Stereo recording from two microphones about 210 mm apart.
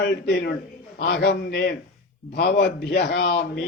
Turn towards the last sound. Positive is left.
turn(degrees=50)  # may be behind; listen again after turning